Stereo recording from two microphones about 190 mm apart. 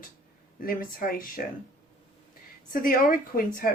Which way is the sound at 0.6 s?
50° left (ahead or behind).